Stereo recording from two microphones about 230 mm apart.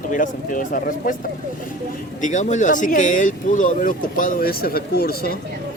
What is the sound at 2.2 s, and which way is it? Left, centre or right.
Speech, left.